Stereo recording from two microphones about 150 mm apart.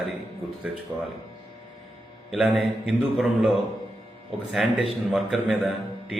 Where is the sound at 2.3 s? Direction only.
5° right (ahead or behind).